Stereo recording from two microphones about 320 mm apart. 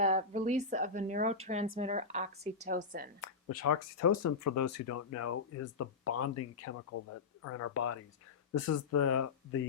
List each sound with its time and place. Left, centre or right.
0.0 s speech: right
3.2 s speech: left